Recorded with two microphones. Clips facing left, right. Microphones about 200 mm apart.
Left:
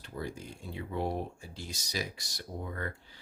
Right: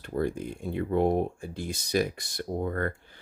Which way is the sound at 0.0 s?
55° right (ahead or behind).